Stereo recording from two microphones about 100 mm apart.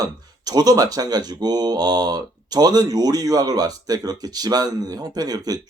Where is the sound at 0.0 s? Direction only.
40° right (ahead or behind).